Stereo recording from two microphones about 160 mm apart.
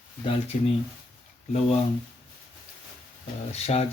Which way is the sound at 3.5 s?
40° left (ahead or behind).